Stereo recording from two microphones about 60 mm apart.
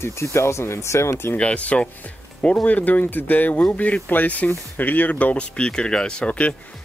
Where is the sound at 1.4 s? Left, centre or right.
Left.